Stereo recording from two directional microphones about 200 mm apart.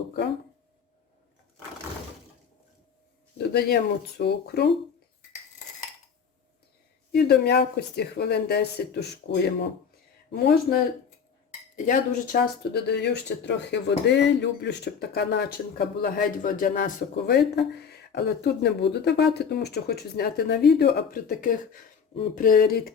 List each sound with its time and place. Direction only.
3.3 s speech: 55° left (ahead or behind)
7.1 s speech: 55° left (ahead or behind)
11.9 s speech: 40° left (ahead or behind)
16.0 s speech: 45° left (ahead or behind)